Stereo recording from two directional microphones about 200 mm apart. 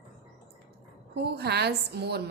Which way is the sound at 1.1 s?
55° right (ahead or behind).